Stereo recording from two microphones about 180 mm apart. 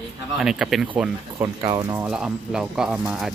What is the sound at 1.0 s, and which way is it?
Speech, 15° right (ahead or behind).